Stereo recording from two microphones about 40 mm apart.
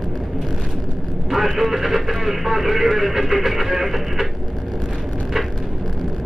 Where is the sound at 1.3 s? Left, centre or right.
Centre.